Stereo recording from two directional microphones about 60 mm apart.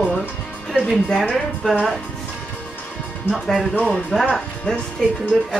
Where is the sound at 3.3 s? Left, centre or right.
Centre.